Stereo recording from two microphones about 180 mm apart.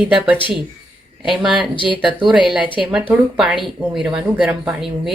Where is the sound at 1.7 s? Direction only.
30° left (ahead or behind).